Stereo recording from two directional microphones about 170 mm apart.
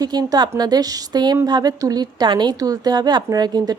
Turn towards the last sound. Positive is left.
turn(degrees=-25)  # may be behind; listen again after turning